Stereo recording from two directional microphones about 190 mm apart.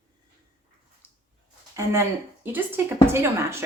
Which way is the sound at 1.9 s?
10° right (ahead or behind).